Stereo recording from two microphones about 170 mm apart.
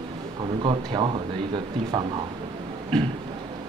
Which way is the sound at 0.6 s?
30° right (ahead or behind).